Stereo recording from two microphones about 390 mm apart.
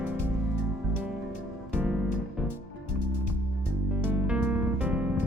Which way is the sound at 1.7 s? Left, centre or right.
Centre.